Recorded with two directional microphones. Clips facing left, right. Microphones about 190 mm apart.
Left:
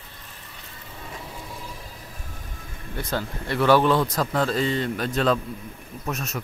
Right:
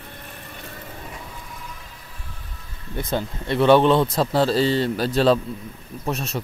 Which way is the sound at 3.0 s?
20° right (ahead or behind).